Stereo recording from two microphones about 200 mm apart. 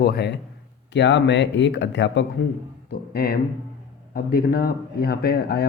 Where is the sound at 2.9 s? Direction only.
50° left (ahead or behind).